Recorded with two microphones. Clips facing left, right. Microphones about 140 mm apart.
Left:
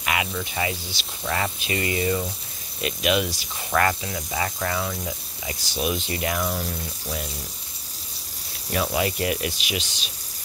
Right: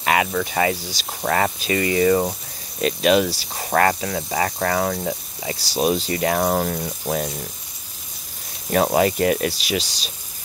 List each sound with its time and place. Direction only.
0.0 s snake: 45° right (ahead or behind)
0.3 s speech: 60° right (ahead or behind)
2.8 s speech: 40° right (ahead or behind)
4.0 s speech: 50° right (ahead or behind)
5.5 s speech: 35° right (ahead or behind); by 7.2 s 55° right (ahead or behind)
8.7 s speech: 45° right (ahead or behind)